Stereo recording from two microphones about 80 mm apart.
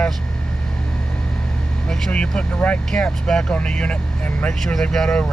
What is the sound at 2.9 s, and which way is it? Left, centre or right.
Speech, centre.